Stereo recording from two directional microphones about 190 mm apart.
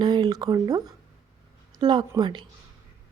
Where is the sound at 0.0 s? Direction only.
25° right (ahead or behind).